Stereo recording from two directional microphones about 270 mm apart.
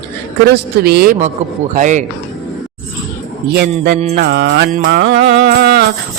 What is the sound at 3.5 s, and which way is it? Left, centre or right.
Music, right.